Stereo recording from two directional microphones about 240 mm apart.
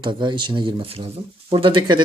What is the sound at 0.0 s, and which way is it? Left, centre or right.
Speech, centre.